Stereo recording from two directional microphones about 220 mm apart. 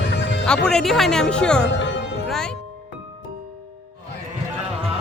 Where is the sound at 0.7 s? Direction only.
Centre (ahead or behind).